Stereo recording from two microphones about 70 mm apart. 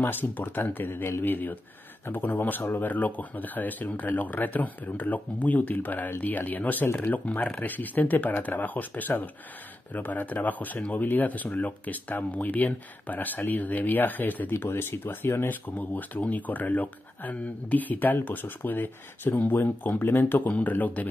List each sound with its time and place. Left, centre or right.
0.0 s speech: left